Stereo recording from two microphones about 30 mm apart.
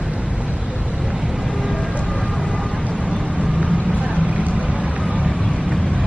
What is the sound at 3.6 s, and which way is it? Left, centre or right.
Vehicle, right.